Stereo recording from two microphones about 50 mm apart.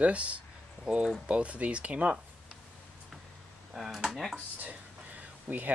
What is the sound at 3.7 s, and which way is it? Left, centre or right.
Speech, centre.